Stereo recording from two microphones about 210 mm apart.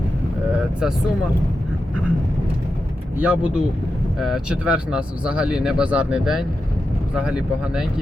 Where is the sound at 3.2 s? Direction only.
5° right (ahead or behind).